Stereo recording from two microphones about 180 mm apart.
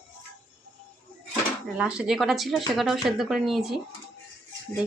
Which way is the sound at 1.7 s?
5° right (ahead or behind).